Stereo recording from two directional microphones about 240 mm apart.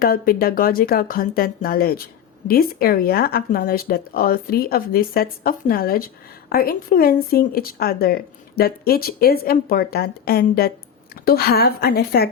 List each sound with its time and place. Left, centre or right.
0.0 s speech: left